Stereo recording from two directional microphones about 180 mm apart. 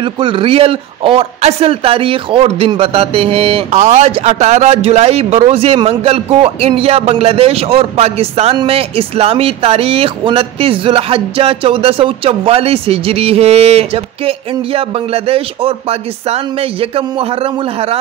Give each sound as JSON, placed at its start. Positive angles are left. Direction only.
{"t": 0.0, "sound": "speech", "side_deg": -25}